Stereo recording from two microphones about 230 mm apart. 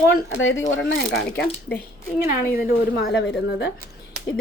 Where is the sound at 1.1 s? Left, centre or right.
Centre.